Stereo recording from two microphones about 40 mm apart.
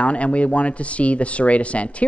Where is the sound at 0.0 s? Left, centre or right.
Left.